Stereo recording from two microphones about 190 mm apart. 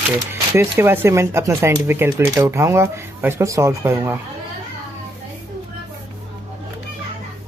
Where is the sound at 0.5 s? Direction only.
10° right (ahead or behind).